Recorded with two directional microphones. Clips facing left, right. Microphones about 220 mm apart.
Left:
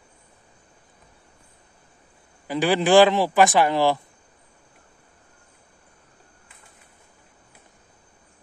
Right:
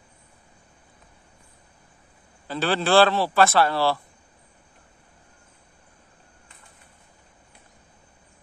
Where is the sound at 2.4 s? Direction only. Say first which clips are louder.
Left 4 dB; 15° left (ahead or behind).